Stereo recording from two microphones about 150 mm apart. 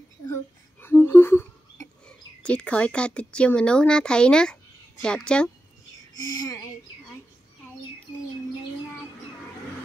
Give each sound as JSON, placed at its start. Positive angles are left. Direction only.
{"t": 0.7, "sound": "a woman's voice", "side_deg": 15}
{"t": 6.2, "sound": "a child's voice", "side_deg": 25}